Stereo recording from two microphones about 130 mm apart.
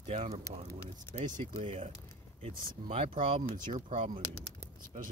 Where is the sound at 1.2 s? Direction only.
70° right (ahead or behind).